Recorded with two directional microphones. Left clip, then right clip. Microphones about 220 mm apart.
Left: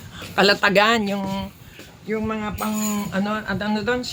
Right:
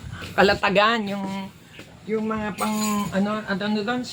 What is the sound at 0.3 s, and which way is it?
Speech, 45° left (ahead or behind).